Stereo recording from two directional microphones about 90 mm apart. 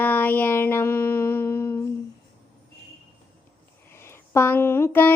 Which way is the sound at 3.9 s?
30° left (ahead or behind).